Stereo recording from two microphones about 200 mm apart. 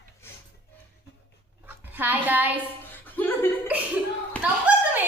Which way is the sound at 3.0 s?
10° left (ahead or behind).